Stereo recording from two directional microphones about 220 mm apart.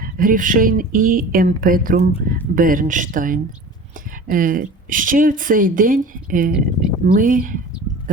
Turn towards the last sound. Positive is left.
turn(degrees=-35)  # may be behind; listen again after turning